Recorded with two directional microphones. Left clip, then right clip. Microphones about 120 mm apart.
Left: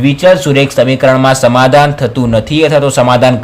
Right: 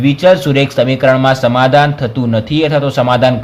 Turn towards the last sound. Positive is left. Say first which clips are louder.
# left 3 dB
turn(degrees=30)  # may be behind; listen again after turning